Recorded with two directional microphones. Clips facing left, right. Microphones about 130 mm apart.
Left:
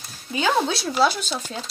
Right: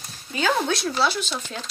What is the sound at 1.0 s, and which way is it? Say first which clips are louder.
Speech: left 7 dB; 45° left (ahead or behind).